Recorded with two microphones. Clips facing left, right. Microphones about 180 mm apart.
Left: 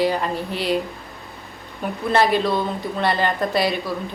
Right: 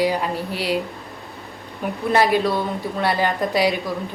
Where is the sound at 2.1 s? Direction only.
10° right (ahead or behind).